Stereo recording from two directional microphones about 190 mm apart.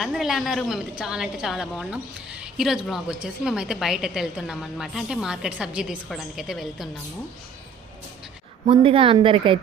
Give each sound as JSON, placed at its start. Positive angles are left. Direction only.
{"t": 0.0, "sound": "a woman's voice", "side_deg": 0}
{"t": 8.6, "sound": "a woman's voice", "side_deg": -30}